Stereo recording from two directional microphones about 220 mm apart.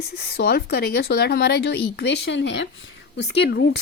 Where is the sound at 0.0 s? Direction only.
45° left (ahead or behind).